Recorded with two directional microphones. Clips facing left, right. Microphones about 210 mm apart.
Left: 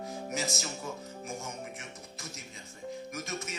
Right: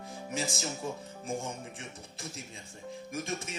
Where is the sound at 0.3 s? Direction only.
30° right (ahead or behind).